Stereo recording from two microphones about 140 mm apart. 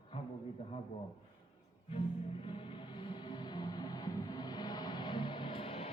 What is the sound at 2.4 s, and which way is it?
Music, 40° left (ahead or behind).